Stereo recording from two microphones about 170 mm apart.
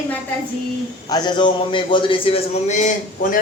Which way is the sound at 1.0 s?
25° left (ahead or behind).